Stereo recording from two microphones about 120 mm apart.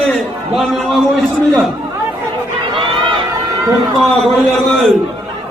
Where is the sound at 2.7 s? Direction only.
45° right (ahead or behind).